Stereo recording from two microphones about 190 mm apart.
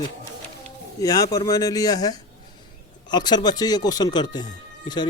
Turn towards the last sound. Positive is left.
turn(degrees=20)  # may be behind; listen again after turning